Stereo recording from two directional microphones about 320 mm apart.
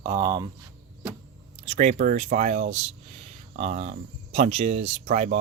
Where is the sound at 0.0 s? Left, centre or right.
Centre.